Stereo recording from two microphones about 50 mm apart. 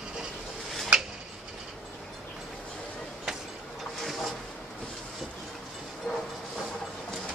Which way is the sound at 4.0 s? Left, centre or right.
Centre.